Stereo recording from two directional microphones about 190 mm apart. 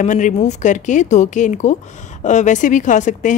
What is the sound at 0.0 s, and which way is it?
Speech, 40° left (ahead or behind).